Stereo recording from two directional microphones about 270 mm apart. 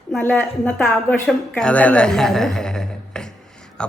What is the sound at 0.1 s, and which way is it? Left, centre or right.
A woman's voice, centre.